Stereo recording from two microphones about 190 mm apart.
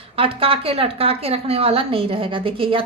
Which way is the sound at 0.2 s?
30° right (ahead or behind).